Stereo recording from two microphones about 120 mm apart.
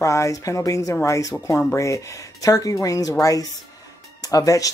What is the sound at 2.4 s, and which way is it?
Speech, 30° left (ahead or behind).